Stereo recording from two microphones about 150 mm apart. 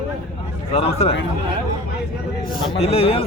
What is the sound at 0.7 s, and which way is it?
Speech, 45° left (ahead or behind).